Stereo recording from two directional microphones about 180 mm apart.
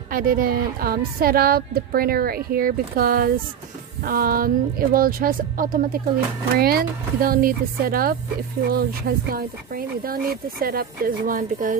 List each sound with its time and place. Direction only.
0.1 s a woman's voice: 55° right (ahead or behind)